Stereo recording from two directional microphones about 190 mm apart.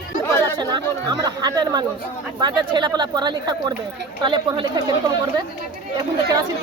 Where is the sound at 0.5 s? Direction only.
20° right (ahead or behind).